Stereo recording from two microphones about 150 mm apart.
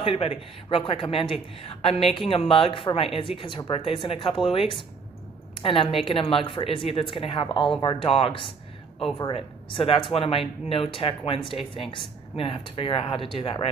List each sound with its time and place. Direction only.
0.0 s speech: 40° left (ahead or behind)